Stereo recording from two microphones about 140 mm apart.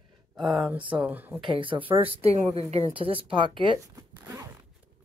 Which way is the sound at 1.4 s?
40° right (ahead or behind).